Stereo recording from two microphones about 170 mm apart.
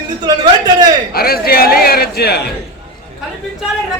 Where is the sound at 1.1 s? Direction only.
65° left (ahead or behind).